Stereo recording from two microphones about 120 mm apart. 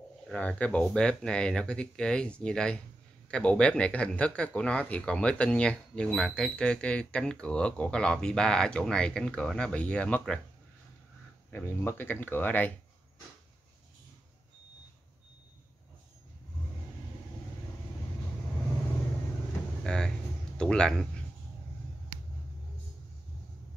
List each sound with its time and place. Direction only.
0.3 s speech: 10° left (ahead or behind)
11.5 s speech: 20° left (ahead or behind)
19.8 s speech: 5° left (ahead or behind)